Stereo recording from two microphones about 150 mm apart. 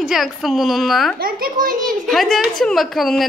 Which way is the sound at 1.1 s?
75° right (ahead or behind).